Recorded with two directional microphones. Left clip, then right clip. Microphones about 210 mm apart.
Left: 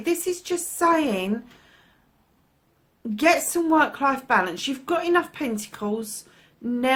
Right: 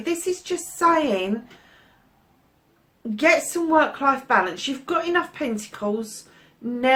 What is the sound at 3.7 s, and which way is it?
A woman's voice, 45° left (ahead or behind).